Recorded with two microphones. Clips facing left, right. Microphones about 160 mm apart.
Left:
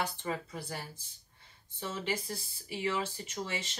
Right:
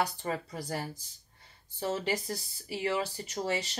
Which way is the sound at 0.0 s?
35° right (ahead or behind).